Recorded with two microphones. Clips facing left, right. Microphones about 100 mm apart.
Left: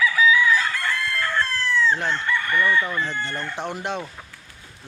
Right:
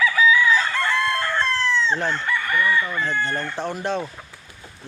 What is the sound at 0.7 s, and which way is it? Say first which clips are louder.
Chicken: right 4 dB; 25° right (ahead or behind).